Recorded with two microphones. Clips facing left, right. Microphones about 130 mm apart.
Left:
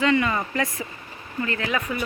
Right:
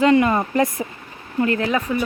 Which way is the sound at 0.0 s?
45° right (ahead or behind).